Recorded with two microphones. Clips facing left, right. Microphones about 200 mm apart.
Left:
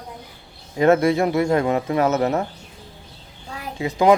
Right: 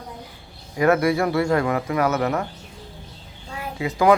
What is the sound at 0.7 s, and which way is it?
Speech, 25° left (ahead or behind).